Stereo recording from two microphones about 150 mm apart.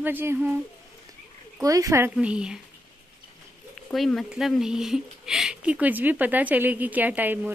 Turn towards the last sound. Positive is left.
turn(degrees=-10)  # may be behind; listen again after turning